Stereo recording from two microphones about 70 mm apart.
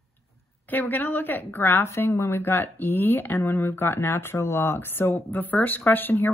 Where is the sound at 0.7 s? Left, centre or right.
Left.